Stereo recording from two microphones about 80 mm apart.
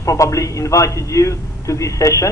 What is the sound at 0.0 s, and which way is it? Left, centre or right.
A man's voice, left.